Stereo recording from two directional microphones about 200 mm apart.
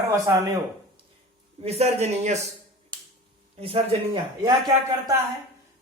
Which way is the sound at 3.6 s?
25° right (ahead or behind).